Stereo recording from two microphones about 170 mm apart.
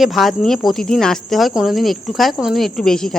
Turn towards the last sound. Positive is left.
turn(degrees=5)  # may be behind; listen again after turning